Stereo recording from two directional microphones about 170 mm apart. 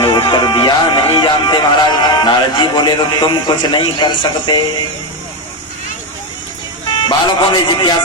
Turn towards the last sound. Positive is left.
turn(degrees=25)  # may be behind; listen again after turning